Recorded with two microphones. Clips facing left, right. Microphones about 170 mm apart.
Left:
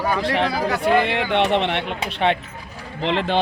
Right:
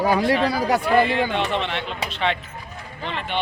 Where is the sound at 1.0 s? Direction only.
70° left (ahead or behind).